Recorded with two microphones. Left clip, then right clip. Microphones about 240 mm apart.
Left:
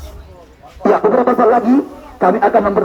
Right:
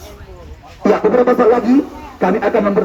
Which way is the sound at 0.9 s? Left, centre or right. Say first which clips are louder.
Even; left.